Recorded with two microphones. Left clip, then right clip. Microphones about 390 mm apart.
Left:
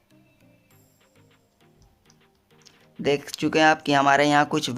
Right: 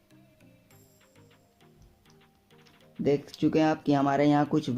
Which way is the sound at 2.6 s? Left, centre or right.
Left.